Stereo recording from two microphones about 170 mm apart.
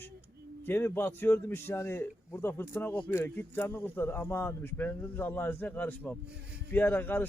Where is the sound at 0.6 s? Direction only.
10° left (ahead or behind).